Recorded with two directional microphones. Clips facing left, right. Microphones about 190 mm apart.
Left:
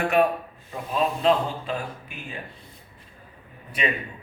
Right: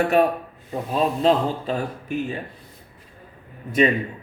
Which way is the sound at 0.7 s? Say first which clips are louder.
Right 3 dB; 35° right (ahead or behind).